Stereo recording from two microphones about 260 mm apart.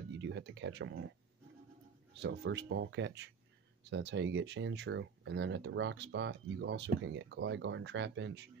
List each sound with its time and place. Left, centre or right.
0.2 s speech: right
2.2 s speech: right